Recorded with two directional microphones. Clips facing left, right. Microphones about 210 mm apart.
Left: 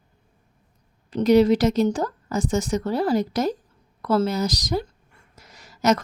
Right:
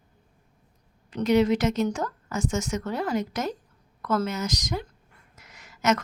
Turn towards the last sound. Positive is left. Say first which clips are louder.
# left 4 dB
turn(degrees=35)  # may be behind; listen again after turning